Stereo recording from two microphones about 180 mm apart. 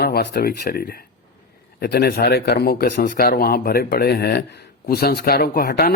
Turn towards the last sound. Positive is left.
turn(degrees=55)  # may be behind; listen again after turning